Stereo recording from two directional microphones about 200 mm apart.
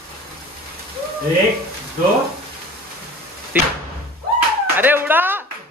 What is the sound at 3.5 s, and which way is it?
Speech, 10° right (ahead or behind).